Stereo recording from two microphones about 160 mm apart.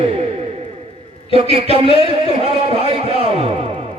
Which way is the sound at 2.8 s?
40° right (ahead or behind).